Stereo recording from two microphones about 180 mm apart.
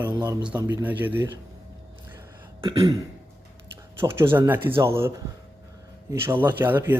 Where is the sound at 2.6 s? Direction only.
20° right (ahead or behind).